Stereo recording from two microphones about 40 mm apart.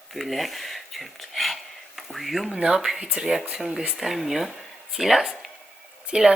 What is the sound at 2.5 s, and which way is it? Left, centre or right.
Speech, right.